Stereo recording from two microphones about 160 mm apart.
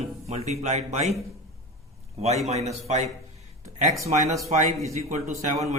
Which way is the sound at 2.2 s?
45° right (ahead or behind).